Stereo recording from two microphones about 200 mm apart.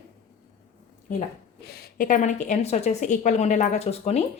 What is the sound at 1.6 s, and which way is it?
A woman's voice, 50° left (ahead or behind).